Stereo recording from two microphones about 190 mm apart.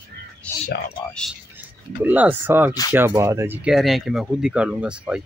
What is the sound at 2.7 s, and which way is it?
Speech, 20° left (ahead or behind).